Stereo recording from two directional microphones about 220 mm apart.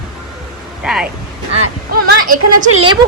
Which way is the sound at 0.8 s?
5° right (ahead or behind).